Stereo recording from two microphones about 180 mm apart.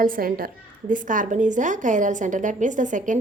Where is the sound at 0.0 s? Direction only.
50° right (ahead or behind).